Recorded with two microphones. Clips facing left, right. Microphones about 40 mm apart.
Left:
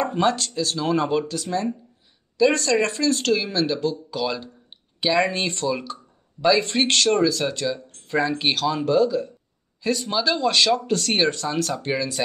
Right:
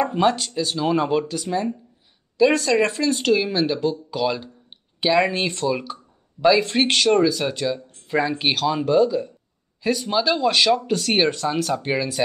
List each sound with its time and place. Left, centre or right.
0.0 s speech: centre